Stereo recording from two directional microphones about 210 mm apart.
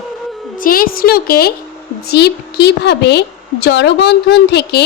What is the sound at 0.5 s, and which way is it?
A woman's voice, 40° left (ahead or behind).